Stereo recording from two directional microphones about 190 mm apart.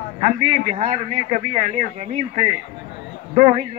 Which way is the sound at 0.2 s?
40° right (ahead or behind).